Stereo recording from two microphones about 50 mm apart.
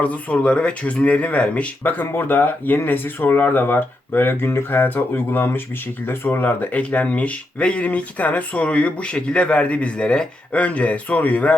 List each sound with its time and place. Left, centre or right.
0.0 s speech: left
1.8 s speech: left